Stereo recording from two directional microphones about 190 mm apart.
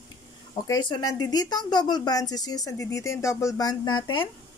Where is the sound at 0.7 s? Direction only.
20° left (ahead or behind).